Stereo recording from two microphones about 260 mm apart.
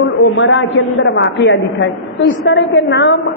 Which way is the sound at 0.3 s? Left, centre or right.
Left.